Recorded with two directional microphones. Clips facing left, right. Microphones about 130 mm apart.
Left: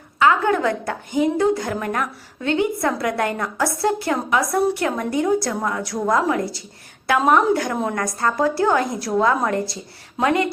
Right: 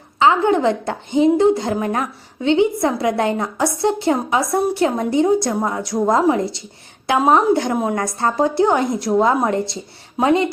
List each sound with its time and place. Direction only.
0.2 s a woman's voice: 25° right (ahead or behind)